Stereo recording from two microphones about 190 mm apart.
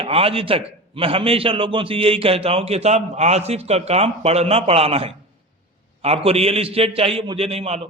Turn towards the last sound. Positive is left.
turn(degrees=-30)  # may be behind; listen again after turning